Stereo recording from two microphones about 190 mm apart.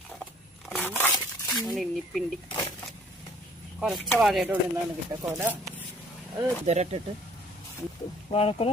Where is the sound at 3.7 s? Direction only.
Centre (ahead or behind).